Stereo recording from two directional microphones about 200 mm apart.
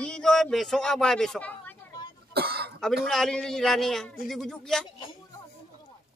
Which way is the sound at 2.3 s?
50° right (ahead or behind).